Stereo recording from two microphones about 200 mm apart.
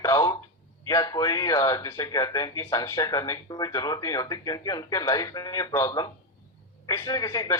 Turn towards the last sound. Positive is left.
turn(degrees=15)  # may be behind; listen again after turning